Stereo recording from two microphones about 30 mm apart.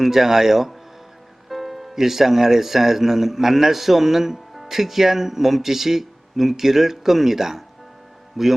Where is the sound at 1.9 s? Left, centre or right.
Centre.